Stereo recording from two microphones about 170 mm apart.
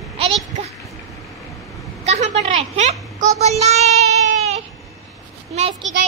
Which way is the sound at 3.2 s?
50° right (ahead or behind).